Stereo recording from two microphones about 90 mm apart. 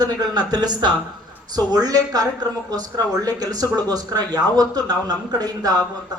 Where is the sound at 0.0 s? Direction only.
50° right (ahead or behind).